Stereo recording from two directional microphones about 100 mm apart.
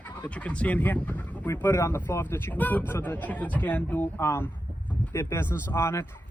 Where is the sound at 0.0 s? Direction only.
15° left (ahead or behind).